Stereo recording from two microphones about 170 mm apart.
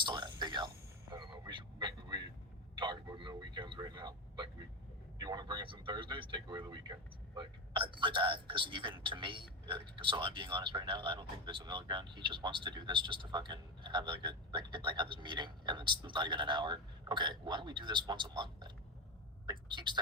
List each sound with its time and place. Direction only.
0.0 s a sound: 25° right (ahead or behind)
1.1 s vehicle: 25° right (ahead or behind)
5.1 s a woman's voice: 25° right (ahead or behind)